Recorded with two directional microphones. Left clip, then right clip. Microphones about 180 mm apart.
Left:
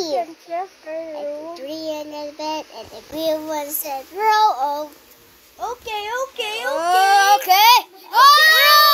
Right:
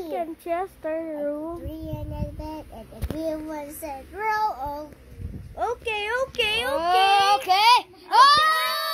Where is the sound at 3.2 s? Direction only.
45° left (ahead or behind).